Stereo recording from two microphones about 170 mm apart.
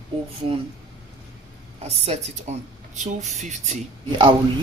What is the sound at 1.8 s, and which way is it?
Speech, 40° right (ahead or behind).